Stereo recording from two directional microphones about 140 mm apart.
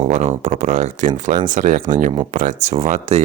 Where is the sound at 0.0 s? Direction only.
55° right (ahead or behind); by 2.0 s 75° right (ahead or behind).